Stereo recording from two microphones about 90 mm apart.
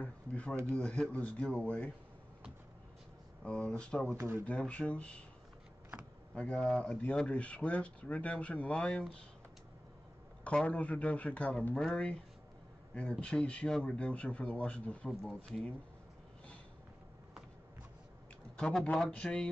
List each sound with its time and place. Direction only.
0.0 s speech: 15° left (ahead or behind)
3.4 s speech: 10° left (ahead or behind)
4.2 s speech: 30° right (ahead or behind)
4.5 s speech: 15° left (ahead or behind)
6.3 s speech: 10° left (ahead or behind)
10.4 s speech: 15° left (ahead or behind)
13.2 s speech: 10° left (ahead or behind)
18.6 s speech: 5° left (ahead or behind)